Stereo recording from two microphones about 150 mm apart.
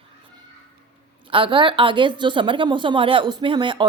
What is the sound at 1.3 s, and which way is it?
A woman's voice, 35° right (ahead or behind).